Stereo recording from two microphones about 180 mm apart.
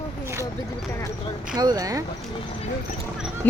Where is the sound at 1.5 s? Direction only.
20° right (ahead or behind).